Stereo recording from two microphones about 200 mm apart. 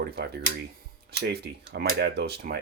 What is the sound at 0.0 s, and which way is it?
Speech, 50° right (ahead or behind).